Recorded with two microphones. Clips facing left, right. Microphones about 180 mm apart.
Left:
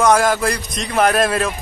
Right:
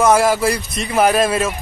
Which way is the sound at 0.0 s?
5° right (ahead or behind).